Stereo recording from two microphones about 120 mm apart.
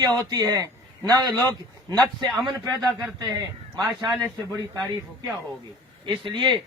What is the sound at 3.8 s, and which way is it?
A man's voice, 30° right (ahead or behind).